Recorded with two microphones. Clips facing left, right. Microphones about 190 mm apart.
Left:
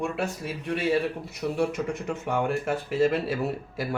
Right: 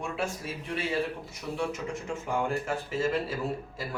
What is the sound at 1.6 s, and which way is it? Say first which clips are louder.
A man's voice: left 5 dB; 65° left (ahead or behind).